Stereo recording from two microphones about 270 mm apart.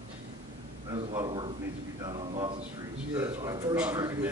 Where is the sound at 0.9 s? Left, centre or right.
Centre.